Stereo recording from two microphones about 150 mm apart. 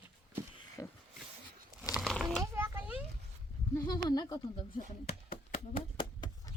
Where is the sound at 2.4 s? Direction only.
20° right (ahead or behind).